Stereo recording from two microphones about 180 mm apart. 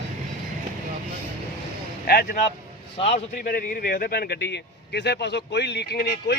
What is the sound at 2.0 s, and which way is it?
Speech, 55° left (ahead or behind).